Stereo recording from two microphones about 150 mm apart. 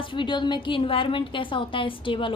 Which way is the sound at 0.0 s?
35° left (ahead or behind).